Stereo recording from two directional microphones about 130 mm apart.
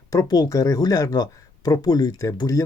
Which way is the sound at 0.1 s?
30° left (ahead or behind).